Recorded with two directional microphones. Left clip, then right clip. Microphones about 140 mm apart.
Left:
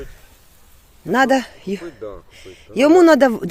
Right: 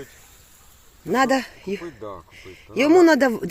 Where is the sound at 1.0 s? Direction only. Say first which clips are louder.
Left 4 dB; 35° left (ahead or behind).